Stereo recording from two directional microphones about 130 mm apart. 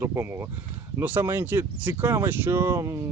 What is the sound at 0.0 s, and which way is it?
Speech, 20° right (ahead or behind).